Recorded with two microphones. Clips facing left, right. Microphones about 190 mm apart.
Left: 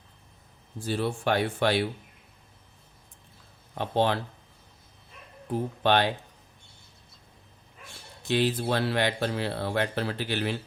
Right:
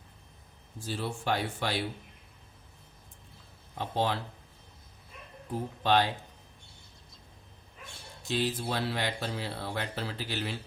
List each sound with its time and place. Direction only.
0.9 s speech: 65° left (ahead or behind)
3.8 s speech: 60° left (ahead or behind)
5.8 s speech: 65° left (ahead or behind)
8.3 s speech: 65° left (ahead or behind)